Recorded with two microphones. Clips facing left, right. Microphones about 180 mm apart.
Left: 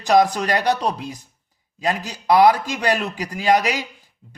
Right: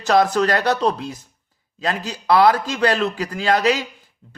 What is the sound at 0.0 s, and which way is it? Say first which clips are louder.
A man's voice: even; 15° left (ahead or behind).